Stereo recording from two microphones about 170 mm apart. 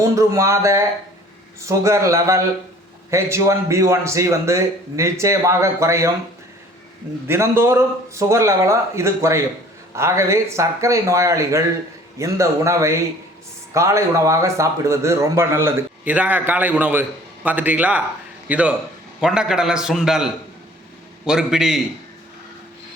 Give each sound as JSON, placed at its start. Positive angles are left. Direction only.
{"t": 0.0, "sound": "a man's voice", "side_deg": -20}
{"t": 7.3, "sound": "a man's voice", "side_deg": -15}